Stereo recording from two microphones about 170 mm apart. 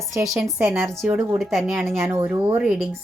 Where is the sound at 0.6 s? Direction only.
15° right (ahead or behind).